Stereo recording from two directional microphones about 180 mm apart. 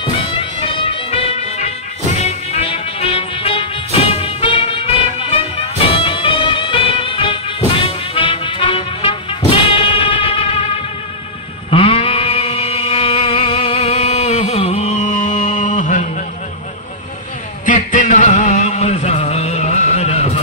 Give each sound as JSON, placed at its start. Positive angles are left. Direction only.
{"t": 0.0, "sound": "music", "side_deg": 30}
{"t": 11.7, "sound": "a sound", "side_deg": 30}
{"t": 17.6, "sound": "music", "side_deg": 45}